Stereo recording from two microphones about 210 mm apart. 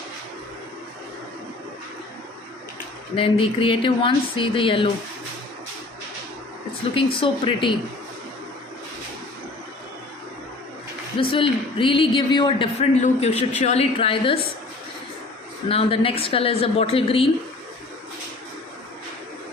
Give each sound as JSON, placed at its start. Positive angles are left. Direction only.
{"t": 3.2, "sound": "a man's voice", "side_deg": 25}
{"t": 7.2, "sound": "a man's voice", "side_deg": 25}
{"t": 11.2, "sound": "a man's voice", "side_deg": 25}
{"t": 15.7, "sound": "a man's voice", "side_deg": 25}